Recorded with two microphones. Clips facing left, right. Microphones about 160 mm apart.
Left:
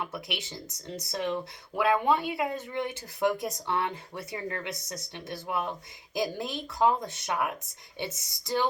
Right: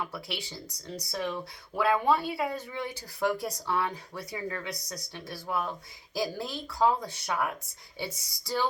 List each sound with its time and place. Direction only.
0.0 s speech: 20° left (ahead or behind)